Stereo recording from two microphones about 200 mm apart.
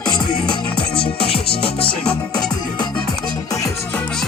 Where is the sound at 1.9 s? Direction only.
5° left (ahead or behind).